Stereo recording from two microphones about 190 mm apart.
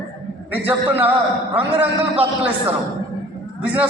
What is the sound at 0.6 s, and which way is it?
Speech, 10° right (ahead or behind).